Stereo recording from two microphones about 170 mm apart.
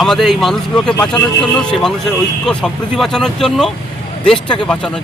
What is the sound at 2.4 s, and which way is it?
Speech, 5° left (ahead or behind).